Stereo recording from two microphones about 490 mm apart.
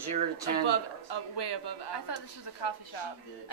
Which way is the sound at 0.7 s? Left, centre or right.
Left.